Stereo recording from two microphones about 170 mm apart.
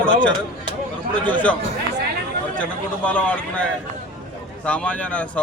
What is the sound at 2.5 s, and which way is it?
Speech, 5° left (ahead or behind).